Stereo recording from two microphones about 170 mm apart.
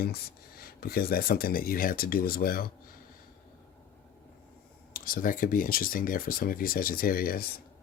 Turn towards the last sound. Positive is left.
turn(degrees=60)  # may be behind; listen again after turning